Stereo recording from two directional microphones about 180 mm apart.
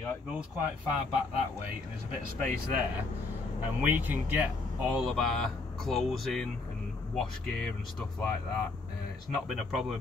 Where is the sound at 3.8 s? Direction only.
10° right (ahead or behind).